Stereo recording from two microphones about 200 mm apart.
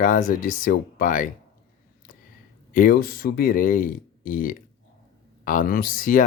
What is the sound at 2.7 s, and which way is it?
Speech, 45° left (ahead or behind).